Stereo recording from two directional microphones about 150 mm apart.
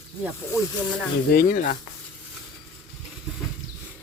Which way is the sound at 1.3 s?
70° left (ahead or behind).